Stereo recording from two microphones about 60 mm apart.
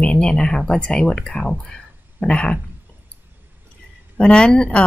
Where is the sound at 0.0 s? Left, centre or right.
Centre.